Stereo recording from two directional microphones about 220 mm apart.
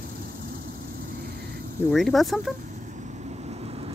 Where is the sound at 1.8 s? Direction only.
Centre (ahead or behind).